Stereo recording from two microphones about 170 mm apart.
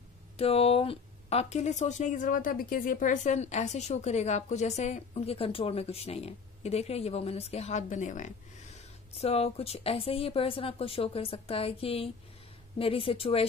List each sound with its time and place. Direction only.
0.4 s a woman's voice: 35° left (ahead or behind)
9.2 s a woman's voice: 35° left (ahead or behind)